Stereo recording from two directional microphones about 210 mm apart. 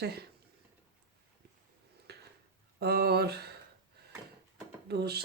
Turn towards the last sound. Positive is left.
turn(degrees=-50)  # may be behind; listen again after turning